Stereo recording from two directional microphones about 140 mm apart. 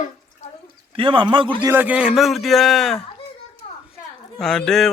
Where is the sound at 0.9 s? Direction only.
40° right (ahead or behind).